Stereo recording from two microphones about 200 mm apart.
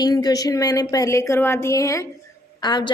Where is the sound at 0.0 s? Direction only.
20° left (ahead or behind).